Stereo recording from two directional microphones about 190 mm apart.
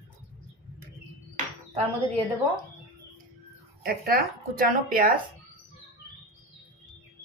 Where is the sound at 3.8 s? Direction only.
50° right (ahead or behind).